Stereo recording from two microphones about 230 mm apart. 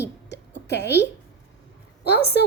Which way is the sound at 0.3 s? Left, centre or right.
Left.